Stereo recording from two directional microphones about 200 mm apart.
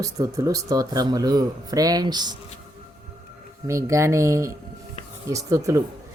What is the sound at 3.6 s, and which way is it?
Speech, 15° right (ahead or behind).